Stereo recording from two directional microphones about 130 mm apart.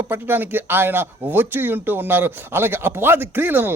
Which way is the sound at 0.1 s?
15° right (ahead or behind).